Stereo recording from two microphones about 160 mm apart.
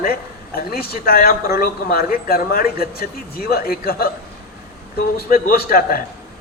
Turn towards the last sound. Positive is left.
turn(degrees=70)  # may be behind; listen again after turning